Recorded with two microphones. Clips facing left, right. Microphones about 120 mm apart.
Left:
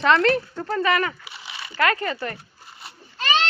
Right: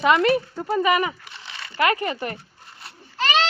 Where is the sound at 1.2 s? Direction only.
10° left (ahead or behind).